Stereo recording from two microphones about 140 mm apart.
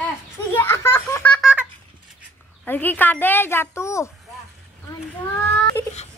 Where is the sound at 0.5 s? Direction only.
15° left (ahead or behind).